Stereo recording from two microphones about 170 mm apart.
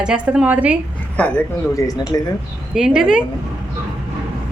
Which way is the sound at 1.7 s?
20° left (ahead or behind).